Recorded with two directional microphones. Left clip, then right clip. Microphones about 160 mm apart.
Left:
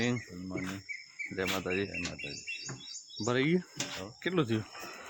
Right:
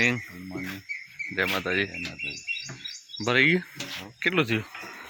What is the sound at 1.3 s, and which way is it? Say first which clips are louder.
Speech: right 7 dB; centre (ahead or behind).